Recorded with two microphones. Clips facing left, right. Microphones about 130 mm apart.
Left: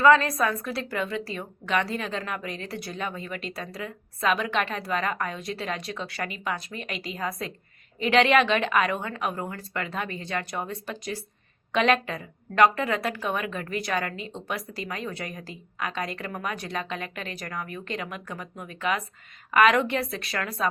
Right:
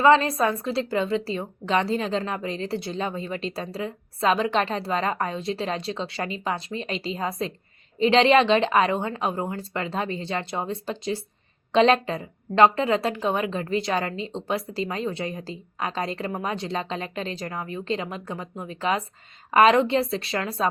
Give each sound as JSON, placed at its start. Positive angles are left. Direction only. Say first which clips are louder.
{"t": 0.0, "sound": "a woman's voice", "louder": "right 1 dB", "side_deg": -25}